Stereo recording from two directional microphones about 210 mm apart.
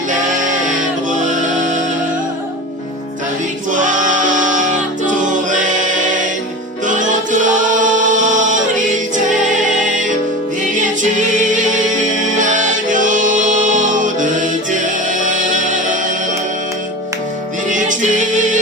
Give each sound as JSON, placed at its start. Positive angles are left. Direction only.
{"t": 0.8, "sound": "music", "side_deg": -35}
{"t": 3.7, "sound": "music", "side_deg": -35}
{"t": 5.0, "sound": "choir", "side_deg": -40}
{"t": 6.8, "sound": "music", "side_deg": -35}
{"t": 9.8, "sound": "music", "side_deg": -35}
{"t": 17.7, "sound": "music", "side_deg": -35}